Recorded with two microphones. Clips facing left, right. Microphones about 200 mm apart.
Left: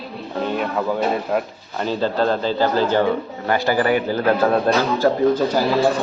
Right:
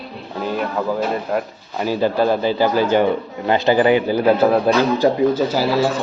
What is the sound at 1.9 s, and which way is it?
Speech, 10° right (ahead or behind).